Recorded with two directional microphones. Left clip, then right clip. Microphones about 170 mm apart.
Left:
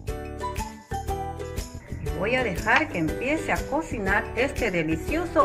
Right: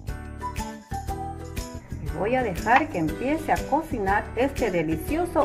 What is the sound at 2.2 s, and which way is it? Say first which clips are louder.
Speech: even; 55° right (ahead or behind).